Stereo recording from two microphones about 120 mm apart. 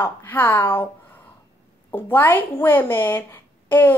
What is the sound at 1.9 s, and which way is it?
Speech, 15° left (ahead or behind).